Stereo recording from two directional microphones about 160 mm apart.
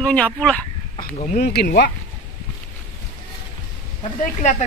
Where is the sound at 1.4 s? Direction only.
90° left.